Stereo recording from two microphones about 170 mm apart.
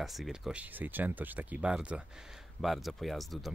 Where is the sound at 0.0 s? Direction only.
Centre (ahead or behind).